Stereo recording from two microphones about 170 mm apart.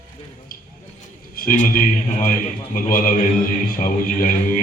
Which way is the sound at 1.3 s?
55° left (ahead or behind).